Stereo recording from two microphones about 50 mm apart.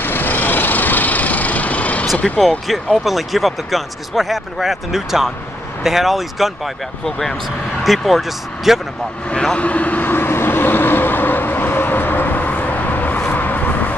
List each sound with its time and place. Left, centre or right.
0.0 s vehicle: left
3.0 s speech: centre
7.1 s speech: centre
9.3 s vehicle: left